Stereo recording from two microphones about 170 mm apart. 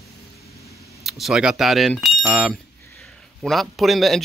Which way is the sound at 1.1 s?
Centre (ahead or behind).